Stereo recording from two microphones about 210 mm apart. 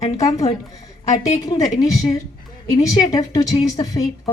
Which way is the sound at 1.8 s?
15° left (ahead or behind).